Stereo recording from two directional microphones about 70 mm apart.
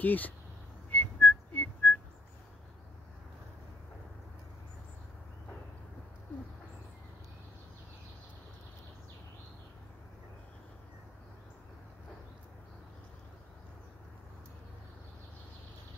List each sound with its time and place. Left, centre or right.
0.0 s speech: left
0.8 s whistling: left